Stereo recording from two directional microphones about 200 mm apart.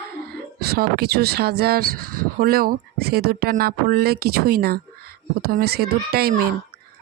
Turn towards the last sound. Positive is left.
turn(degrees=-50)  # may be behind; listen again after turning